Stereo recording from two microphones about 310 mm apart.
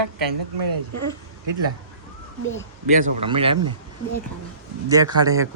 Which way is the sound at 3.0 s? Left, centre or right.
Centre.